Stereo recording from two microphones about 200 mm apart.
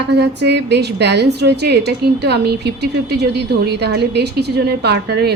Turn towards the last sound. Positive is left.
turn(degrees=-55)  # may be behind; listen again after turning